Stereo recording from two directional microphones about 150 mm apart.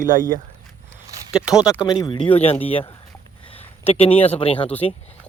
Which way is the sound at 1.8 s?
30° left (ahead or behind).